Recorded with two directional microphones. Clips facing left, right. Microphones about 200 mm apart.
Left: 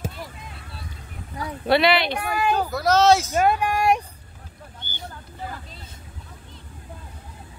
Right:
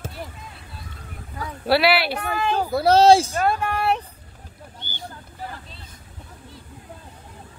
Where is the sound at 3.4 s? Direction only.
15° left (ahead or behind).